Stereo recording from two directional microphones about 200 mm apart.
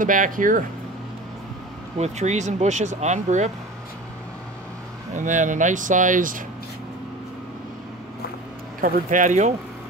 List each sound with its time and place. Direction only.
0.0 s speech: 40° right (ahead or behind)
2.0 s speech: 35° right (ahead or behind)
5.1 s speech: 40° right (ahead or behind)
8.8 s speech: 40° right (ahead or behind)